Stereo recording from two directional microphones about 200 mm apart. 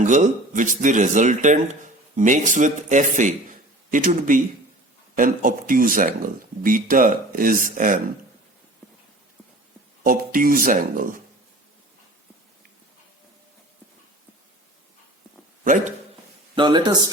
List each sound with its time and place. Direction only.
0.0 s speech: 40° right (ahead or behind)
10.0 s speech: 45° right (ahead or behind)
15.6 s a man's voice: 40° right (ahead or behind)
16.6 s a man's voice: 20° right (ahead or behind)